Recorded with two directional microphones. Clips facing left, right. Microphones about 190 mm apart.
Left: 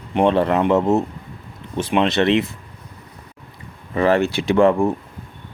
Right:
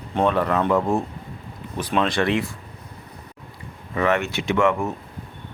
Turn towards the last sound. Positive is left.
turn(degrees=30)  # may be behind; listen again after turning